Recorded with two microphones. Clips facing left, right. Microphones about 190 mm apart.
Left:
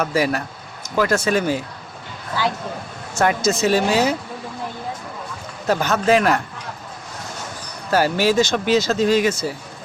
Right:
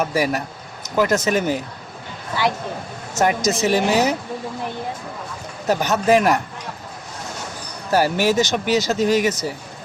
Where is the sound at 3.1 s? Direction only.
20° right (ahead or behind).